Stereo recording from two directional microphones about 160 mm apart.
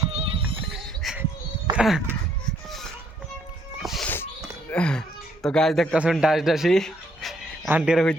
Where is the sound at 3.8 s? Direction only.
Centre (ahead or behind).